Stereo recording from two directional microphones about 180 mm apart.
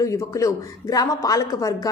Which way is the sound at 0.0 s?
15° left (ahead or behind).